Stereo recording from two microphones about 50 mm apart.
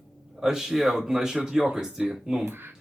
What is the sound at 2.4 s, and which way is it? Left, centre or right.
Speech, right.